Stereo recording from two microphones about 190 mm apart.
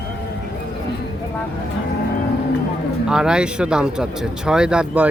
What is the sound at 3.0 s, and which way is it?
Speech, 5° right (ahead or behind).